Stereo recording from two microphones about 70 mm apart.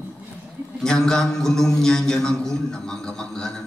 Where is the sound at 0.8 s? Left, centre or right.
Centre.